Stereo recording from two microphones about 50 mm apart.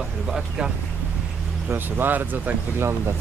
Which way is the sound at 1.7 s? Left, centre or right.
Right.